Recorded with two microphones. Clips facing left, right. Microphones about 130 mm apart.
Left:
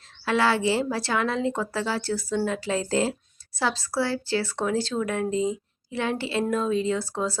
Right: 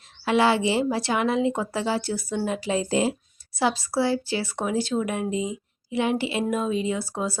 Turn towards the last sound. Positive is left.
turn(degrees=-15)  # may be behind; listen again after turning